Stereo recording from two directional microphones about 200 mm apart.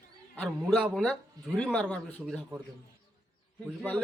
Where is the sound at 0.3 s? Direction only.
Centre (ahead or behind).